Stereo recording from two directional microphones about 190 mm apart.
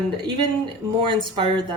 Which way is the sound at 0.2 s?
25° right (ahead or behind).